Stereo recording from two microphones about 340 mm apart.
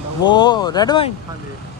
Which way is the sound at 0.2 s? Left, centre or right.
Centre.